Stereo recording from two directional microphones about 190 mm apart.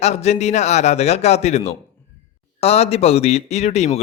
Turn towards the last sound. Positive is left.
turn(degrees=35)  # may be behind; listen again after turning